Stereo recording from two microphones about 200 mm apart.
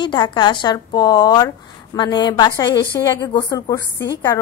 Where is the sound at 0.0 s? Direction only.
25° left (ahead or behind).